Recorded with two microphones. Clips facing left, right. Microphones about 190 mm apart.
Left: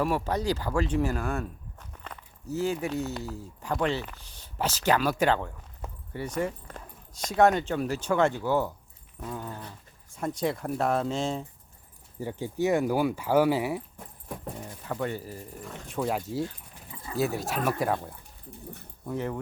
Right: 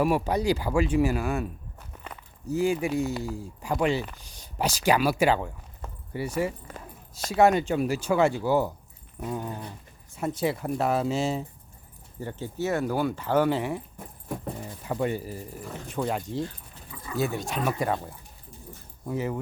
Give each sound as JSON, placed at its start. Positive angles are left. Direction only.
{"t": 0.0, "sound": "speech", "side_deg": -10}
{"t": 12.2, "sound": "speech", "side_deg": 10}
{"t": 14.3, "sound": "speech", "side_deg": -10}
{"t": 16.9, "sound": "dog", "side_deg": 25}
{"t": 17.2, "sound": "speech", "side_deg": 0}